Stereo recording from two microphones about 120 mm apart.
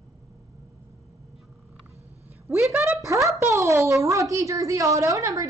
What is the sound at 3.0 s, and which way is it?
A woman's voice, 25° right (ahead or behind).